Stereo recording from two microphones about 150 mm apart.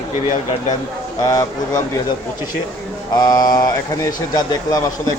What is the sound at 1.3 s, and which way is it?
Speech, 20° left (ahead or behind).